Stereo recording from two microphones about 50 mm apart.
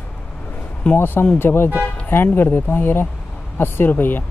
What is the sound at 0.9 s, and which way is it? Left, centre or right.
Speech, left.